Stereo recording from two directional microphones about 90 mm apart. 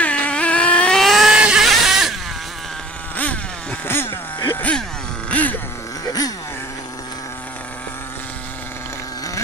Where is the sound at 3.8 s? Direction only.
25° left (ahead or behind).